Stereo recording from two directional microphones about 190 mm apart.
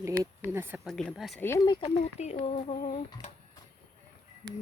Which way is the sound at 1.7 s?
25° left (ahead or behind).